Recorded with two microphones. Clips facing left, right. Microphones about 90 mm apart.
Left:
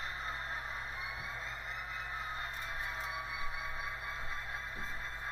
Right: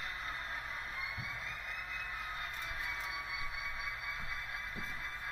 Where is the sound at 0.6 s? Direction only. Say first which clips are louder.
Left 1 dB; 30° left (ahead or behind).